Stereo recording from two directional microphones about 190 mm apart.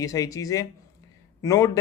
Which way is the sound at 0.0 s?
20° left (ahead or behind).